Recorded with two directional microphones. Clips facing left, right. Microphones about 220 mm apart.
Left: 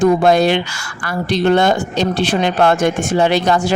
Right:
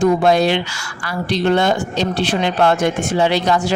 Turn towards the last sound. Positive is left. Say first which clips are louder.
# left 2 dB
turn(degrees=50)  # may be behind; listen again after turning